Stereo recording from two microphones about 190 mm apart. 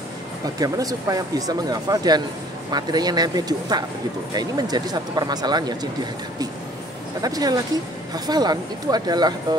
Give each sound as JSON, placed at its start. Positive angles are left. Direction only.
{"t": 0.6, "sound": "speech", "side_deg": -20}
{"t": 7.2, "sound": "speech", "side_deg": -20}